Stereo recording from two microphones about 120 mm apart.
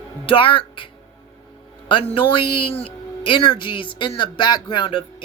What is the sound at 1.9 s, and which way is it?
Speech, 45° left (ahead or behind).